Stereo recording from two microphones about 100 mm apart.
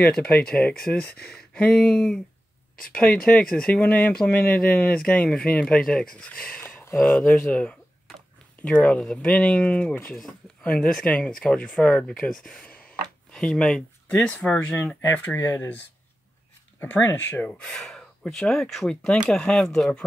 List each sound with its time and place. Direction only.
0.0 s speech: 10° left (ahead or behind)
6.6 s a sound: 20° left (ahead or behind)
7.2 s speech: 15° left (ahead or behind)
15.1 s speech: 20° left (ahead or behind)
16.8 s speech: 20° left (ahead or behind)